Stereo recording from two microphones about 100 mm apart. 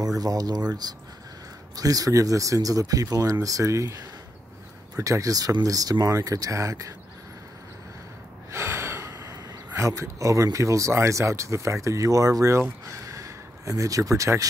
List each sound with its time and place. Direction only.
0.0 s speech: 40° right (ahead or behind)
4.9 s speech: 35° right (ahead or behind)
8.5 s gasp: 25° right (ahead or behind)
9.8 s speech: 30° right (ahead or behind)